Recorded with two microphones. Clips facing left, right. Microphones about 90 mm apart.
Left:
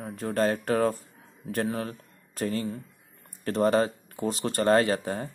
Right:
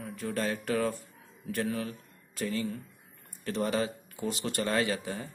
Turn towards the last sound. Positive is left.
turn(degrees=40)  # may be behind; listen again after turning